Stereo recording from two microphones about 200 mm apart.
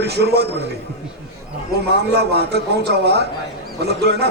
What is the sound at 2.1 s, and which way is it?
Speech, 55° right (ahead or behind).